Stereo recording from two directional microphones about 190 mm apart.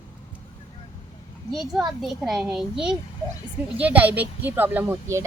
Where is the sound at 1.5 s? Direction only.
Centre (ahead or behind).